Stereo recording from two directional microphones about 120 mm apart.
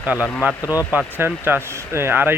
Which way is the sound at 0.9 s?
15° right (ahead or behind).